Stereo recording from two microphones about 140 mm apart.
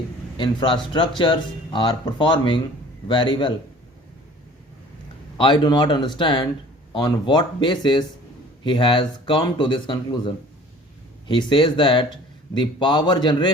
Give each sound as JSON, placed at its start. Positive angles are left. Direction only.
{"t": 0.3, "sound": "speech", "side_deg": 35}
{"t": 5.4, "sound": "speech", "side_deg": 35}